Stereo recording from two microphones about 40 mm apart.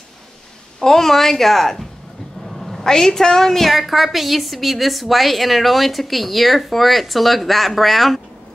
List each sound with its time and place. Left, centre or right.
0.7 s a woman's voice: centre
3.7 s a woman's voice: centre